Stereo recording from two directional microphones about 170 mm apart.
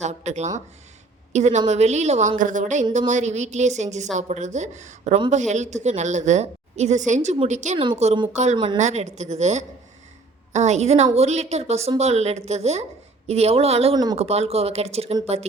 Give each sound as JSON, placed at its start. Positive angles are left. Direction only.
{"t": 0.0, "sound": "a woman's voice", "side_deg": -40}
{"t": 8.8, "sound": "a woman's voice", "side_deg": -40}
{"t": 13.9, "sound": "a woman's voice", "side_deg": -25}
{"t": 14.2, "sound": "a woman's voice", "side_deg": -40}